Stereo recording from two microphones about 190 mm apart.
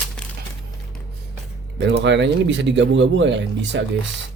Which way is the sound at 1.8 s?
70° right (ahead or behind).